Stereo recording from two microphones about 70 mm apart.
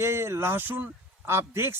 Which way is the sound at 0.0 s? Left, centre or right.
Right.